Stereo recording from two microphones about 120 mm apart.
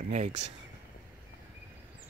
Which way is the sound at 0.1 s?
80° right.